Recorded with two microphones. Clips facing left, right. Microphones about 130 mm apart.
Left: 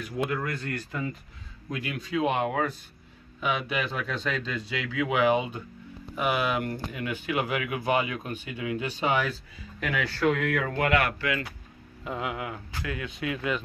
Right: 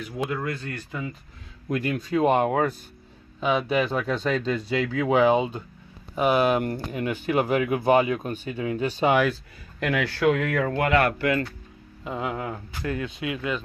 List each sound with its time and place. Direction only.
0.3 s speech: 20° right (ahead or behind)
1.7 s speech: 45° right (ahead or behind)
3.3 s speech: 30° right (ahead or behind)
9.8 s speech: 65° right (ahead or behind)
10.5 s speech: 35° right (ahead or behind)
12.0 s speech: 25° right (ahead or behind)
13.2 s speech: 20° right (ahead or behind)